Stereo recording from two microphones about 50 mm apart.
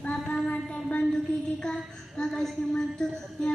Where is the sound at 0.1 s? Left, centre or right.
Left.